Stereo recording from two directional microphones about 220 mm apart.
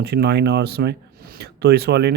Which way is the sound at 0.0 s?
50° right (ahead or behind).